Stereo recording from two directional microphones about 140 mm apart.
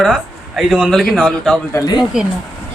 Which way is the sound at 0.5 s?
5° right (ahead or behind).